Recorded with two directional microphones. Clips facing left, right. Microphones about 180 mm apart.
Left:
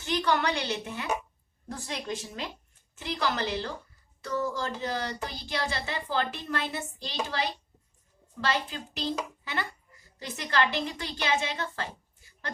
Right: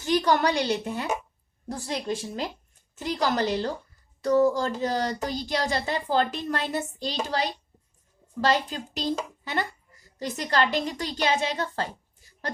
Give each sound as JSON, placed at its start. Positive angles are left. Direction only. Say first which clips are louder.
{"t": 0.0, "sound": "a woman's voice", "louder": "right 5 dB", "side_deg": -40}